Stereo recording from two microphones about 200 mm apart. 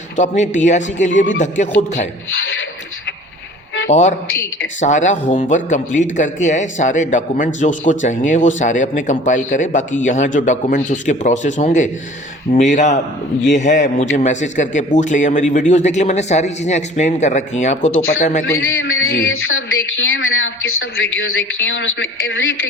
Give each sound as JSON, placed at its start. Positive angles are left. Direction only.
{"t": 0.2, "sound": "a man's voice", "side_deg": 35}
{"t": 2.3, "sound": "a sound", "side_deg": 75}
{"t": 3.8, "sound": "a man's voice", "side_deg": 35}
{"t": 18.9, "sound": "a woman's voice", "side_deg": 75}